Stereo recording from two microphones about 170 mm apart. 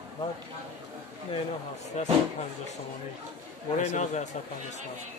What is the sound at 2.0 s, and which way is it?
Speech, 40° left (ahead or behind).